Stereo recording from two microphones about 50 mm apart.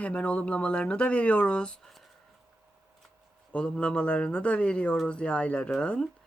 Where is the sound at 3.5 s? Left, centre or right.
Left.